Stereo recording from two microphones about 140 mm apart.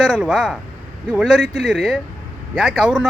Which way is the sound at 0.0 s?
5° right (ahead or behind).